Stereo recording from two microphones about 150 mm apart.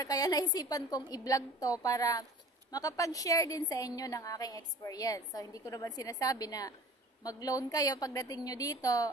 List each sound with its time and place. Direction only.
0.0 s a woman's voice: 25° left (ahead or behind)